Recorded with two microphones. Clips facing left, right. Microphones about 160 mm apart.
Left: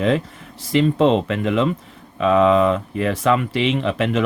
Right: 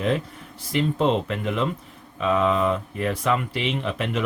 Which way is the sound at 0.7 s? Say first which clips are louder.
Left 6 dB; 90° left.